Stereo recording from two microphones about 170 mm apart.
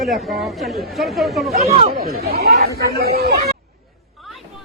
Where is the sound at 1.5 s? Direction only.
40° right (ahead or behind).